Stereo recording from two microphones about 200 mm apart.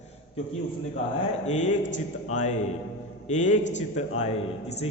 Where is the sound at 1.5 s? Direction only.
35° left (ahead or behind).